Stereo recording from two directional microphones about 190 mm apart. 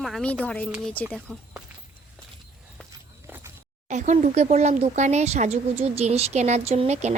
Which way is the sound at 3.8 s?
40° right (ahead or behind).